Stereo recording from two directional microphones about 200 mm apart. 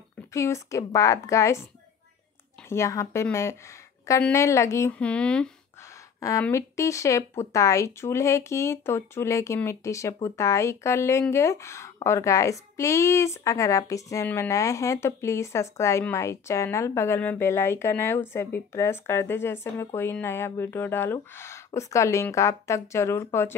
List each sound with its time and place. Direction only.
0.3 s speech: 15° left (ahead or behind)
2.7 s speech: 15° left (ahead or behind)
6.1 s a woman's voice: 15° left (ahead or behind)